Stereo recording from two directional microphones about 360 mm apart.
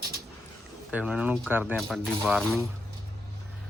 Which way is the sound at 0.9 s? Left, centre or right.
Centre.